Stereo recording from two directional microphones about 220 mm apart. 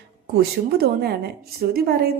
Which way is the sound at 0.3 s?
45° right (ahead or behind).